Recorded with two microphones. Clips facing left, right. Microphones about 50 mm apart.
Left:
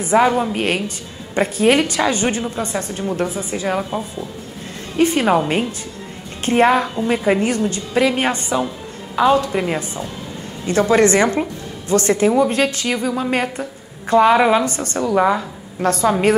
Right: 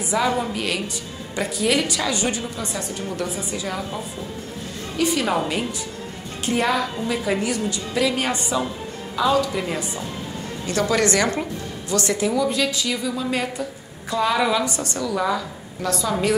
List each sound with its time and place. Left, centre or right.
0.0 s a woman's voice: left